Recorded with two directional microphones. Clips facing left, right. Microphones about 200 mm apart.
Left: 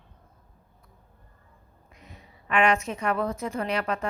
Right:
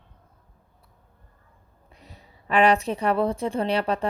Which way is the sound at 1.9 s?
35° right (ahead or behind).